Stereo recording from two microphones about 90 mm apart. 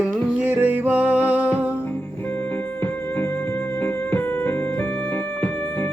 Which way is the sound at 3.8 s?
20° left (ahead or behind).